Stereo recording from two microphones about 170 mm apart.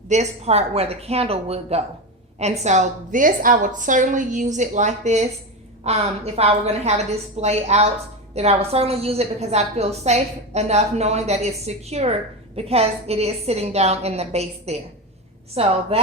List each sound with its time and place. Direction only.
0.1 s a woman's voice: 40° right (ahead or behind)